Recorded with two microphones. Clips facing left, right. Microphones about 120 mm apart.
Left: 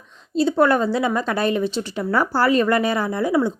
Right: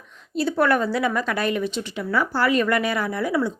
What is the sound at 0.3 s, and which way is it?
Speech, 25° left (ahead or behind).